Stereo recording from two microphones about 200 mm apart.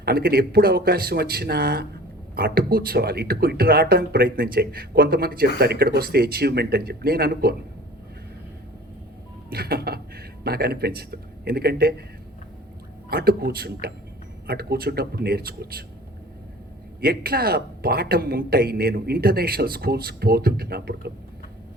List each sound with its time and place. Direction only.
0.0 s speech: 50° right (ahead or behind)
9.5 s speech: 50° right (ahead or behind)
13.1 s speech: 50° right (ahead or behind)
17.0 s speech: 50° right (ahead or behind)